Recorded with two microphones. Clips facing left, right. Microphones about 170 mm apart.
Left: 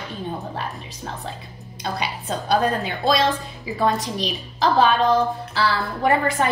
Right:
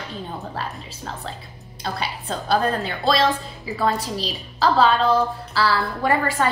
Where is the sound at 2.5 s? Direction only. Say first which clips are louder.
Even; 15° left (ahead or behind).